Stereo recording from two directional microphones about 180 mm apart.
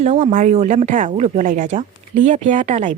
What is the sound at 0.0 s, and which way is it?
Speech, 40° right (ahead or behind).